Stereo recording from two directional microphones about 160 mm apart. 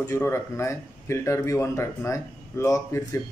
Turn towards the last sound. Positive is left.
turn(degrees=15)  # may be behind; listen again after turning